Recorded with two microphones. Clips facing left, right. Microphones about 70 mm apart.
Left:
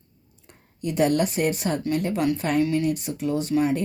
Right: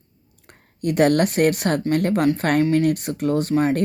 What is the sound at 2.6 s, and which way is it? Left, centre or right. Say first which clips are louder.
Speech: right 4 dB; right.